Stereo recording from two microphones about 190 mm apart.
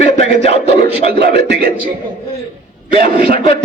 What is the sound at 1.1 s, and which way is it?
Speech, 55° right (ahead or behind).